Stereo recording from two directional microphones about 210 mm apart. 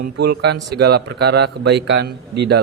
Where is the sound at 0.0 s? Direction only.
50° right (ahead or behind).